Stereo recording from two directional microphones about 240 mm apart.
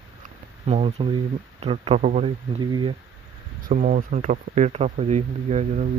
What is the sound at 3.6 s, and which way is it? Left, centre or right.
Speech, right.